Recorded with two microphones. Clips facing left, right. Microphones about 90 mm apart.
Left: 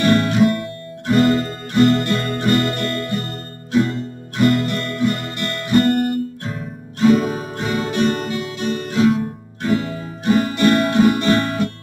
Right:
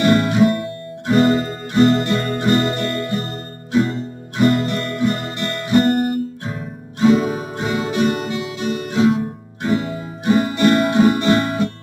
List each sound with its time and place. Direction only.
0.0 s guitar: 15° right (ahead or behind)
7.0 s music: 20° right (ahead or behind)
8.3 s guitar: 20° right (ahead or behind)